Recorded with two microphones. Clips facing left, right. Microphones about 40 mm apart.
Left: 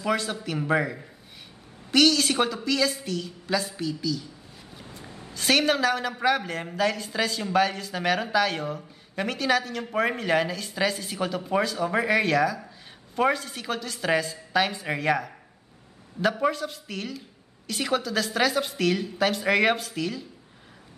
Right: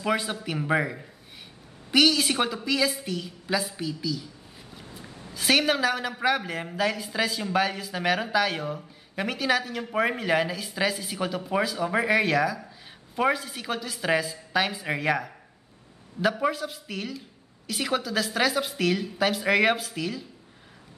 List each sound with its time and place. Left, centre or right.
0.0 s a woman's voice: centre
5.3 s a woman's voice: centre